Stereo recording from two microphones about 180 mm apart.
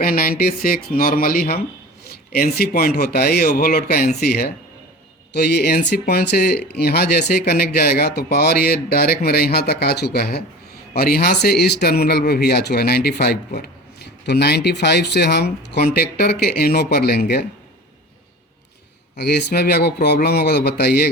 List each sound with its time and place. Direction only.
0.0 s speech: 55° left (ahead or behind)
19.1 s speech: 65° left (ahead or behind)